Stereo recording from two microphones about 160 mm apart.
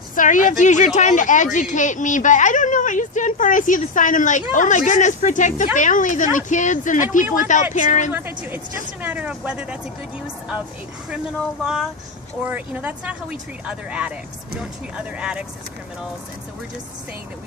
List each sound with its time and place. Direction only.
0.2 s a woman's voice: 55° left (ahead or behind)
8.1 s speech: 15° right (ahead or behind)
11.6 s speech: centre (ahead or behind)